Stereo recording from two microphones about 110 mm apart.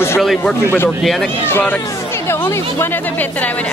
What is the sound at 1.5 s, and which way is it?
Speech, 20° left (ahead or behind).